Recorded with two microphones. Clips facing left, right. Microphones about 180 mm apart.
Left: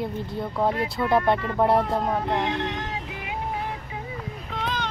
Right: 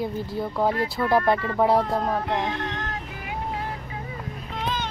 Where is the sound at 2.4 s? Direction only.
15° left (ahead or behind).